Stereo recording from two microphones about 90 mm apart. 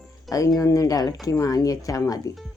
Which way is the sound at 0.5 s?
40° left (ahead or behind).